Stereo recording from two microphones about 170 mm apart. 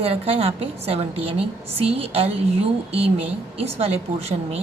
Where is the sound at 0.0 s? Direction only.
35° right (ahead or behind).